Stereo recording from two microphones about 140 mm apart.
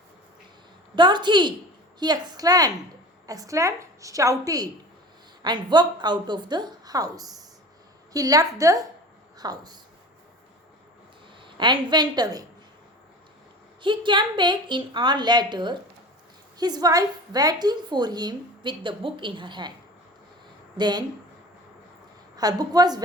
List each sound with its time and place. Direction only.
0.9 s a woman's voice: 35° right (ahead or behind)
11.4 s a woman's voice: 35° right (ahead or behind)
13.8 s a woman's voice: 35° right (ahead or behind)
20.7 s a woman's voice: 30° right (ahead or behind)
22.4 s a woman's voice: 30° right (ahead or behind)